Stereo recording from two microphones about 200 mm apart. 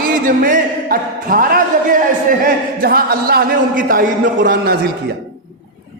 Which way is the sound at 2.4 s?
50° right (ahead or behind).